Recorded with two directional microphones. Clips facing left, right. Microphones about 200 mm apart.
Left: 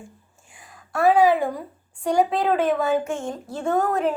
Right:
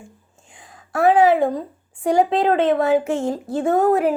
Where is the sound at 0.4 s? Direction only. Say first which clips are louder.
Right 3 dB; 20° right (ahead or behind).